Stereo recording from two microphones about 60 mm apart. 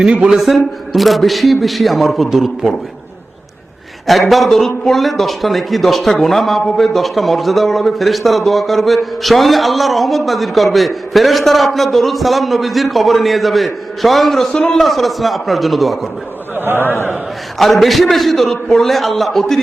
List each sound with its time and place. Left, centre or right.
0.0 s a man's voice: centre
0.3 s speech: centre
4.0 s speech: centre
14.5 s a man's voice: centre
14.8 s speech: centre
16.7 s a man's voice: left
17.6 s speech: centre